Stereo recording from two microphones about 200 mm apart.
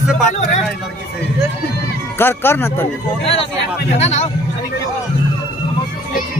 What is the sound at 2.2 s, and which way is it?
Speech, 10° left (ahead or behind).